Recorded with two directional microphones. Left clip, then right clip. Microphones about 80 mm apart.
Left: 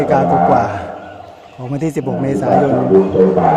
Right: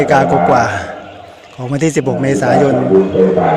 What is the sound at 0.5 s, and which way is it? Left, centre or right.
Speech, centre.